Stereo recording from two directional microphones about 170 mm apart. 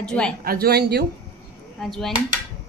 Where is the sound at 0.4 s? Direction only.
65° right (ahead or behind).